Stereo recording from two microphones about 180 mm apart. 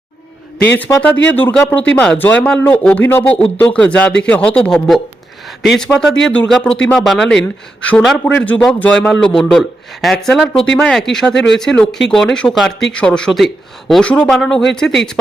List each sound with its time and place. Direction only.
0.8 s speech: 10° left (ahead or behind)
11.3 s speech: 75° left (ahead or behind)
11.6 s speech: 5° left (ahead or behind)